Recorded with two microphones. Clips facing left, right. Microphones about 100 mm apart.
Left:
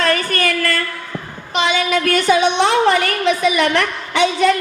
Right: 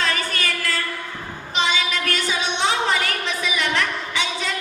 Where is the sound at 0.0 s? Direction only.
55° left (ahead or behind).